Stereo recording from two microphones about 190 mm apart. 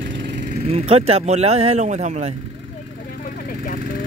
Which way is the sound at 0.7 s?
30° right (ahead or behind).